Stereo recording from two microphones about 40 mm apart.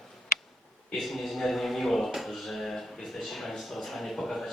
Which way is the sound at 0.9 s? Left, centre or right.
Centre.